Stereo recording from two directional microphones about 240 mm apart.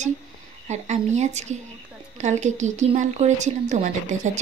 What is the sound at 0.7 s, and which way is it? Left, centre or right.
A woman's voice, right.